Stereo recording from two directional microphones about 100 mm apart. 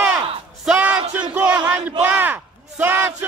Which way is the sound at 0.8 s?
15° right (ahead or behind).